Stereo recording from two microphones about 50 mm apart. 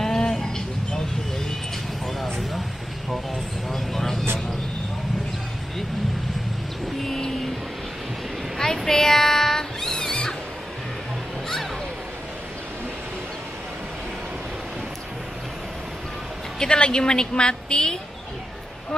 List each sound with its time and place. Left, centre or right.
0.0 s a sound: centre
3.7 s vehicle: centre
7.0 s vehicle: centre
8.5 s a sound: centre
9.9 s music: centre
16.5 s a woman's voice: centre